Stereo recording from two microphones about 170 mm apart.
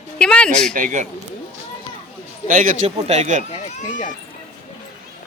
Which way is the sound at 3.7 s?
45° left (ahead or behind).